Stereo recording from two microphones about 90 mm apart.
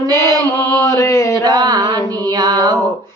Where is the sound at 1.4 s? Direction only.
45° right (ahead or behind).